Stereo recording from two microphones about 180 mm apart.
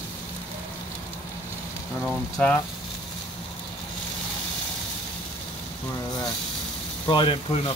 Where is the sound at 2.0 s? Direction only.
5° left (ahead or behind).